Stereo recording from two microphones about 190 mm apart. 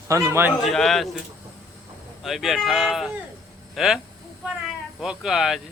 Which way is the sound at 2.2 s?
Centre (ahead or behind).